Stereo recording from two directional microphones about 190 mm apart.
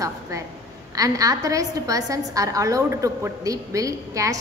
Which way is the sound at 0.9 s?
20° right (ahead or behind).